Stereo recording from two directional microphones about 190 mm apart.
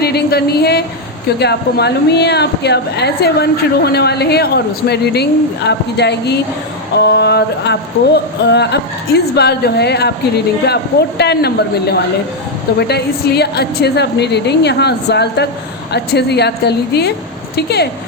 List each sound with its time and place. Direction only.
0.0 s a woman's voice: 55° left (ahead or behind)